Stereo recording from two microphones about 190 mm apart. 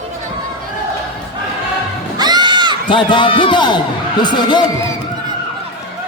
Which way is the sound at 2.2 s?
20° right (ahead or behind).